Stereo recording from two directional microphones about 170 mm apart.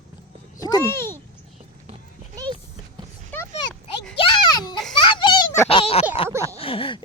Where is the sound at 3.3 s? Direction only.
10° left (ahead or behind).